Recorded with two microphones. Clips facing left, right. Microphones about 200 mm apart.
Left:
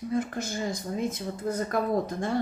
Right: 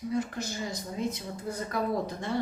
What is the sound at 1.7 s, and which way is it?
Speech, 50° left (ahead or behind).